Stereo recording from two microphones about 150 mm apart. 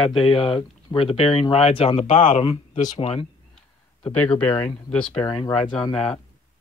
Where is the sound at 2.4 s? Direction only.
40° left (ahead or behind).